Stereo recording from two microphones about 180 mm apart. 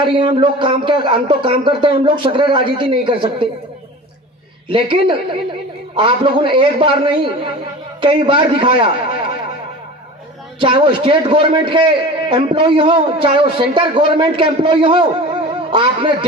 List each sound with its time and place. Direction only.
0.0 s a man's voice: 30° right (ahead or behind)
4.7 s a man's voice: 25° right (ahead or behind)
10.6 s a man's voice: 30° right (ahead or behind)